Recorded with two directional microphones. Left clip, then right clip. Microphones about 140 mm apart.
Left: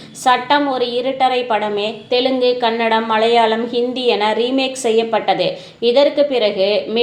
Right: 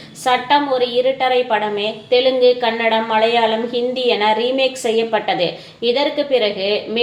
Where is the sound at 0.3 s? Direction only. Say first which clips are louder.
Left 1 dB; 45° left (ahead or behind).